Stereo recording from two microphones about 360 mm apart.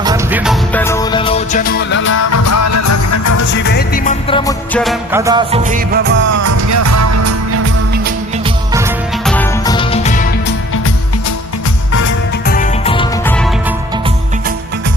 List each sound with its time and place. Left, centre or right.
0.0 s music: centre; by 2.1 s left
2.3 s music: left
3.5 s music: left; by 6.4 s right
6.4 s music: right
8.4 s music: centre
9.3 s music: centre
12.0 s music: left
13.3 s music: centre